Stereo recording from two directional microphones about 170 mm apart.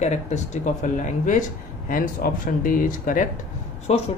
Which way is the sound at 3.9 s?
40° left (ahead or behind).